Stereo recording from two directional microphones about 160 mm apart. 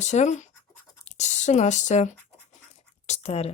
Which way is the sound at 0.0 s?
45° left (ahead or behind).